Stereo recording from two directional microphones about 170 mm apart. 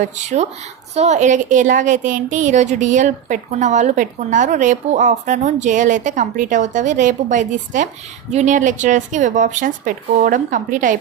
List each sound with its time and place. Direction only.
0.0 s a woman's voice: 45° right (ahead or behind)